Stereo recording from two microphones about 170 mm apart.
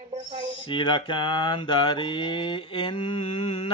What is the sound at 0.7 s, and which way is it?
Mantra, 30° left (ahead or behind).